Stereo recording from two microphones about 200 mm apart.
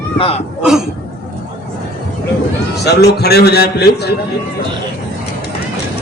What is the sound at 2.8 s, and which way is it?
A man's voice, 55° left (ahead or behind).